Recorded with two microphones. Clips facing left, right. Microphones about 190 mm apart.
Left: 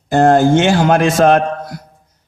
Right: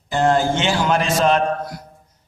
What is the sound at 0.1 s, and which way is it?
A man's voice, 50° left (ahead or behind).